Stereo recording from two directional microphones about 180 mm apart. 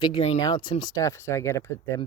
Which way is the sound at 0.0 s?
30° left (ahead or behind).